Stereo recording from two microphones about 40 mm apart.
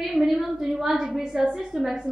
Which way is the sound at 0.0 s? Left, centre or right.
Centre.